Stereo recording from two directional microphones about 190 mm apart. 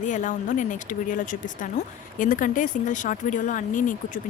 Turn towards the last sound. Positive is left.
turn(degrees=45)  # may be behind; listen again after turning